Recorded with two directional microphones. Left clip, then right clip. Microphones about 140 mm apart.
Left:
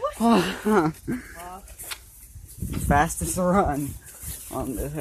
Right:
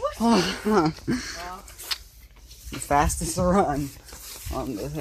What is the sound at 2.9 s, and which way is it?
A woman's voice, 5° right (ahead or behind).